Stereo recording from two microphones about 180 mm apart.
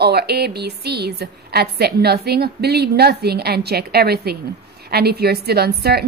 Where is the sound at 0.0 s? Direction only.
65° right (ahead or behind).